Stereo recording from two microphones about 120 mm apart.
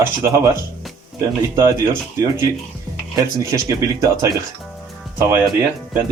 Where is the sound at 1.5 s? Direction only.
25° right (ahead or behind).